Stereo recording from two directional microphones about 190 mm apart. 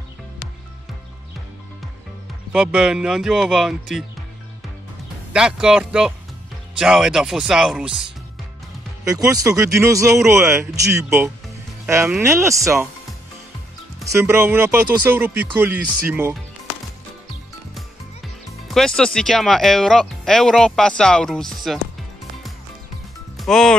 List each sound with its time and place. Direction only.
2.5 s speech: 5° right (ahead or behind)
5.3 s speech: 5° right (ahead or behind)
9.0 s speech: 20° right (ahead or behind)
14.0 s speech: 15° right (ahead or behind)
18.7 s speech: 5° left (ahead or behind)
23.3 s music: centre (ahead or behind)